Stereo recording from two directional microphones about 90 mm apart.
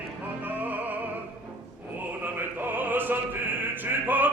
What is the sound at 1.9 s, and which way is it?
Opera, 20° right (ahead or behind).